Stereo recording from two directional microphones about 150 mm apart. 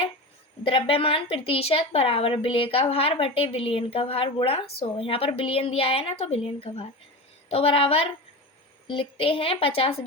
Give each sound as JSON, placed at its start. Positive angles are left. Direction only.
{"t": 0.6, "sound": "a woman's voice", "side_deg": 35}